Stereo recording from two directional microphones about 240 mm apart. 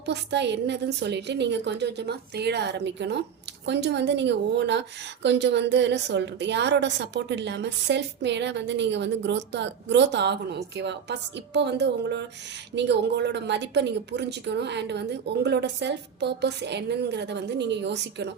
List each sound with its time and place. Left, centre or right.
0.0 s a woman's voice: right